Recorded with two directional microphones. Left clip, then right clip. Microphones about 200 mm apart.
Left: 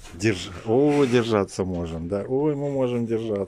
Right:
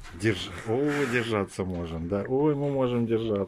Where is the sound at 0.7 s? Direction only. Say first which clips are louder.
Left 7 dB; 20° left (ahead or behind).